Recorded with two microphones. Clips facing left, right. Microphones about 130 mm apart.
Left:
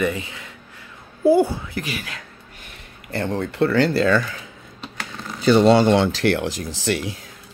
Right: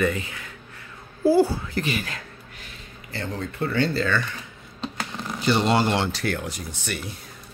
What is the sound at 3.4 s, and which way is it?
Speech, 70° left (ahead or behind).